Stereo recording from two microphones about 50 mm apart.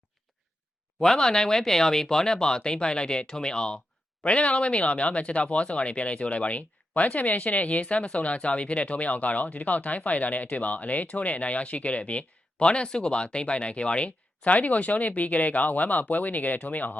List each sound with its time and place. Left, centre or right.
1.0 s speech: centre; by 17.0 s left